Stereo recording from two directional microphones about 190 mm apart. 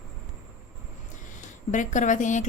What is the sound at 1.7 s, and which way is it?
Speech, 40° left (ahead or behind).